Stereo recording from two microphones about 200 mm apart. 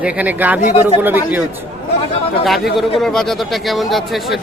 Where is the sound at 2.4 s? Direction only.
Centre (ahead or behind).